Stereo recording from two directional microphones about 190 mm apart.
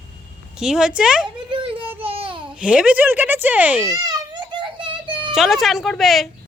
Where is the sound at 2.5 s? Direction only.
5° right (ahead or behind).